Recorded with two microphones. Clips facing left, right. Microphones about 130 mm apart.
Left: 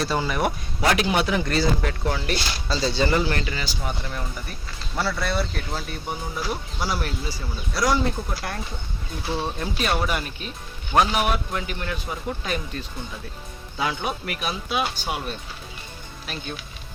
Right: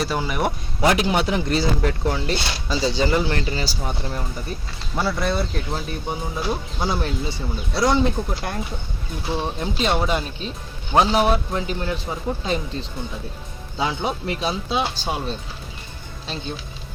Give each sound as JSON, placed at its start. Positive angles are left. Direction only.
{"t": 0.0, "sound": "speech", "side_deg": -10}
{"t": 0.4, "sound": "speech", "side_deg": -25}
{"t": 2.6, "sound": "speech", "side_deg": -15}
{"t": 3.2, "sound": "speech", "side_deg": -30}
{"t": 4.9, "sound": "speech", "side_deg": -20}